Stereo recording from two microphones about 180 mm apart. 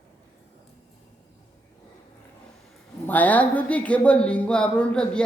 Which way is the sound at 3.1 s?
10° left (ahead or behind).